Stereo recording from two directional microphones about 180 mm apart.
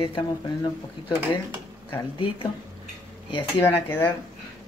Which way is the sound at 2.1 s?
30° left (ahead or behind).